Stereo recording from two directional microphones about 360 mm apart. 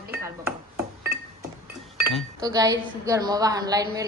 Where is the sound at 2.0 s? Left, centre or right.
Centre.